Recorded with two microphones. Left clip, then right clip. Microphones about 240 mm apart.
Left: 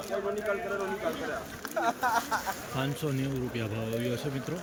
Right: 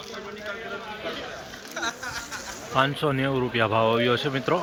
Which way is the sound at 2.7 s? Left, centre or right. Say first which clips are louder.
Right 14 dB; centre.